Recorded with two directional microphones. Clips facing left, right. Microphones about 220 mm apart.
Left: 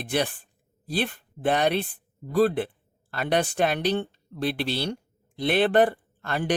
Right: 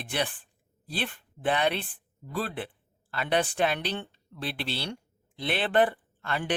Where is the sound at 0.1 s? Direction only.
40° left (ahead or behind).